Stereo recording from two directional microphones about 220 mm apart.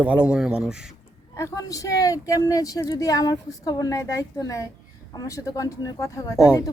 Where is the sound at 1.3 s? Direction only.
15° left (ahead or behind).